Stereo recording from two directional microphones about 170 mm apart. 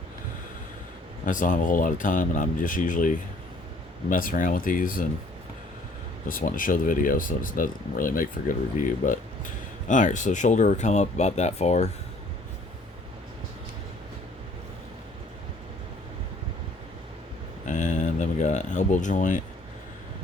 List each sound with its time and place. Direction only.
1.2 s speech: 50° left (ahead or behind)
6.2 s speech: 55° left (ahead or behind)
17.7 s a sound: 45° left (ahead or behind)